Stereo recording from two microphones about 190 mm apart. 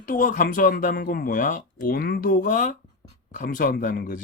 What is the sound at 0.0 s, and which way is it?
Speech, 45° left (ahead or behind).